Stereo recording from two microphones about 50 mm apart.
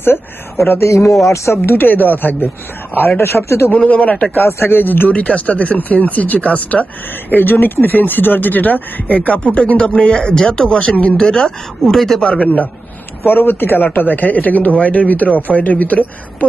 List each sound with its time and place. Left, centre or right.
0.7 s speech: left
1.7 s a man's voice: left
3.2 s speech: left
3.8 s speech: left
4.4 s speech: left
5.1 s speech: left
7.3 s a man's voice: left; by 12.2 s centre
12.2 s speech: left
13.2 s a man's voice: left